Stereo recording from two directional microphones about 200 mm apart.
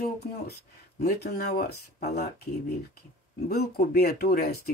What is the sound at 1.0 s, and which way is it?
Speech, 50° left (ahead or behind).